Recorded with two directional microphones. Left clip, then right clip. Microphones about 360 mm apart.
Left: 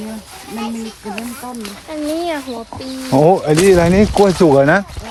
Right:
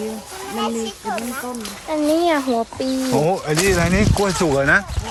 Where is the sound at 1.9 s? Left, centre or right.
Right.